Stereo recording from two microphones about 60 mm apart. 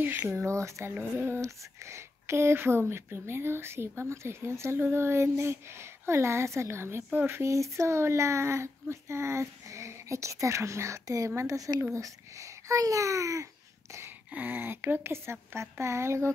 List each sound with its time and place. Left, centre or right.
0.0 s a sound: right
0.3 s speech: right
0.9 s speech: right
1.4 s speech: right
7.4 s speech: right
14.3 s speech: right
15.5 s speech: right